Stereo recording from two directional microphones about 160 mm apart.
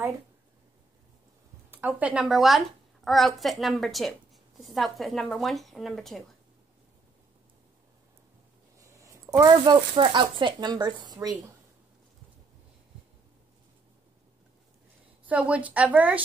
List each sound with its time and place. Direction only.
1.7 s a woman's voice: 10° right (ahead or behind)
8.7 s a sound: 20° right (ahead or behind)
9.4 s speech: 30° right (ahead or behind)
15.2 s a woman's voice: 10° right (ahead or behind)